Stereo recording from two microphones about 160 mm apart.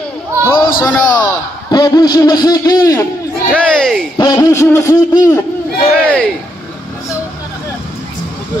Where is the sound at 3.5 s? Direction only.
5° left (ahead or behind).